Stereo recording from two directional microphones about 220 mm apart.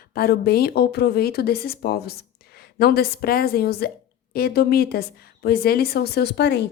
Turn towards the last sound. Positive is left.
turn(degrees=50)  # may be behind; listen again after turning